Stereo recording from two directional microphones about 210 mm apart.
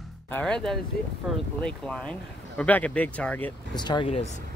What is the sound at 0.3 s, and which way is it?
Speech, 5° left (ahead or behind).